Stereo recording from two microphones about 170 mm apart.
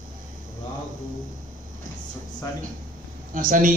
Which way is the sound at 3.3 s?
50° right (ahead or behind).